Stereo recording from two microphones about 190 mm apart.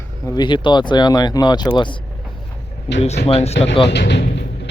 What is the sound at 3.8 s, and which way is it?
Music, 65° left (ahead or behind).